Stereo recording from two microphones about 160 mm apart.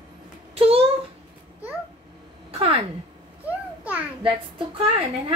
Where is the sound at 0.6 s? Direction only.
35° right (ahead or behind).